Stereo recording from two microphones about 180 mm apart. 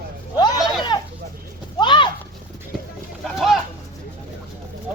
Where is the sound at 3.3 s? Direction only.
Centre (ahead or behind).